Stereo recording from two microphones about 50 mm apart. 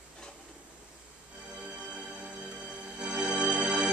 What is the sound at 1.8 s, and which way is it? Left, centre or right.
Music, right.